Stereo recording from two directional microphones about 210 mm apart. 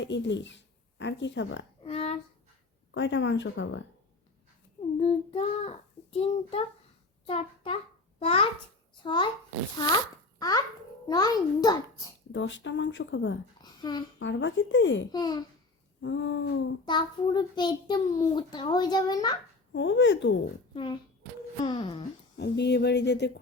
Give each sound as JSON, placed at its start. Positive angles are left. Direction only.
{"t": 0.0, "sound": "speech", "side_deg": 60}
{"t": 1.8, "sound": "a sound", "side_deg": 30}
{"t": 2.9, "sound": "speech", "side_deg": 60}
{"t": 4.9, "sound": "a child's voice", "side_deg": 30}
{"t": 11.1, "sound": "a child's voice", "side_deg": 20}
{"t": 12.3, "sound": "speech", "side_deg": 60}
{"t": 13.6, "sound": "a sound", "side_deg": 20}
{"t": 14.2, "sound": "speech", "side_deg": 60}
{"t": 15.1, "sound": "a child's voice", "side_deg": 20}
{"t": 16.0, "sound": "speech", "side_deg": 65}
{"t": 16.8, "sound": "a child's voice", "side_deg": 20}
{"t": 19.7, "sound": "speech", "side_deg": 60}
{"t": 21.6, "sound": "speech", "side_deg": 25}
{"t": 22.4, "sound": "a sound", "side_deg": 55}